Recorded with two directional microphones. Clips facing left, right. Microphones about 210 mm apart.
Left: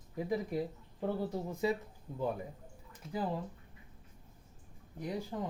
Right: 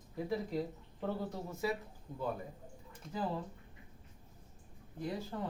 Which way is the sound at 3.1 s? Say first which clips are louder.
Left 2 dB; 15° left (ahead or behind).